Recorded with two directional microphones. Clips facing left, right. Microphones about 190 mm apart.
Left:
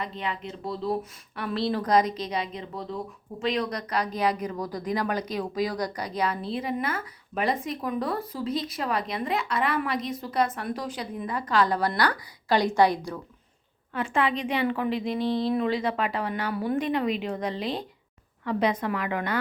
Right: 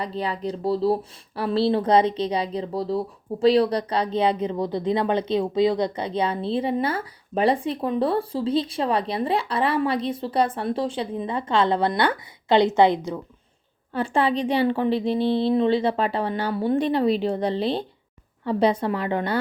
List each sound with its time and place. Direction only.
0.0 s speech: 35° right (ahead or behind)
13.9 s speech: 35° right (ahead or behind)